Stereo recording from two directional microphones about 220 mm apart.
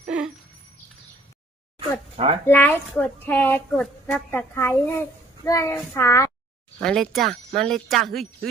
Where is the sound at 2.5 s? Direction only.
10° left (ahead or behind).